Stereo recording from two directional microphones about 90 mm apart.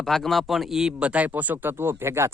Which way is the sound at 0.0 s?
5° left (ahead or behind).